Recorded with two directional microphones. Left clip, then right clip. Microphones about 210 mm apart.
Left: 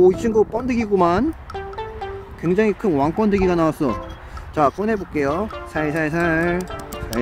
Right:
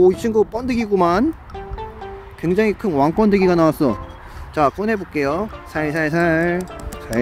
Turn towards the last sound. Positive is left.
turn(degrees=-5)  # may be behind; listen again after turning